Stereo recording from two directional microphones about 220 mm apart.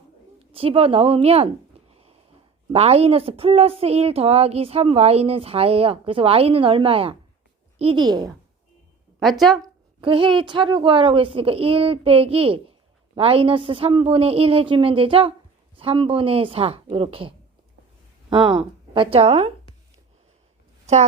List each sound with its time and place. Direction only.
0.3 s a woman's voice: 25° right (ahead or behind)
1.9 s a sound: 25° right (ahead or behind)
2.7 s speech: 25° right (ahead or behind)
9.2 s speech: centre (ahead or behind)
9.6 s speech: 25° right (ahead or behind)
20.8 s a woman's voice: 30° right (ahead or behind)